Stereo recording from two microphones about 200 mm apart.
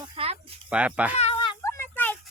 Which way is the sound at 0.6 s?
5° right (ahead or behind).